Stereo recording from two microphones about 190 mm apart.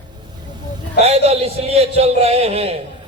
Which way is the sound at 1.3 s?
30° right (ahead or behind).